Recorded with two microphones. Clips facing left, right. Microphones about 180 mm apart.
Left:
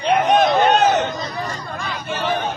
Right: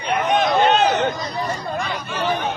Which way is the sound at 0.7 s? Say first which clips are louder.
Left 2 dB; 45° left (ahead or behind).